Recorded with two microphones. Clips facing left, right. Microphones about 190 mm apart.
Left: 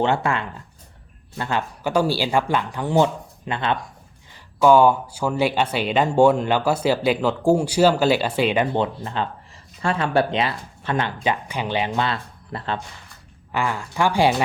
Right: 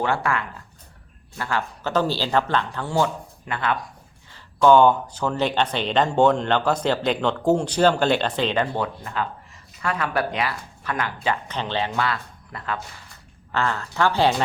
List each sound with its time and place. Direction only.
0.0 s speech: 25° left (ahead or behind)
4.6 s speech: 10° left (ahead or behind); by 12.8 s 30° left (ahead or behind)
13.5 s speech: 10° left (ahead or behind)